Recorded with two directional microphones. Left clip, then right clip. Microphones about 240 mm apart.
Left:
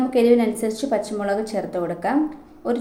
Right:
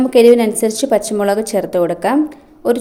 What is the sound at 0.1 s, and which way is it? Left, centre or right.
A woman's voice, right.